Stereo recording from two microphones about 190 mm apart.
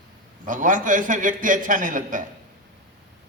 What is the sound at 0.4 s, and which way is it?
A man's voice, 45° right (ahead or behind).